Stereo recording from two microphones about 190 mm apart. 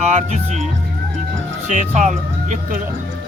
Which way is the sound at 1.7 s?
40° right (ahead or behind).